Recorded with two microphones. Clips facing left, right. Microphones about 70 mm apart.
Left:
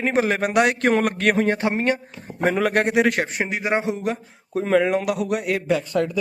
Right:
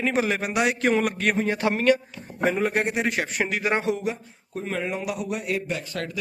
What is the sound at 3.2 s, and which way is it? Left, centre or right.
Speech, left.